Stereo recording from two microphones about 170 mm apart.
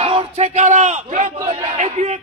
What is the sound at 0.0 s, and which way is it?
A man's voice, 35° right (ahead or behind).